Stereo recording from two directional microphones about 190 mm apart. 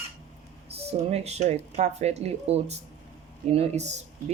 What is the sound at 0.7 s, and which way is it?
Speech, 35° right (ahead or behind).